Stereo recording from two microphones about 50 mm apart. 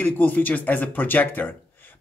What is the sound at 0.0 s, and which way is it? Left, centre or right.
A woman's voice, left.